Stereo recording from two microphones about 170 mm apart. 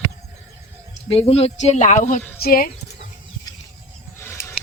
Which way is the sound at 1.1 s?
35° left (ahead or behind).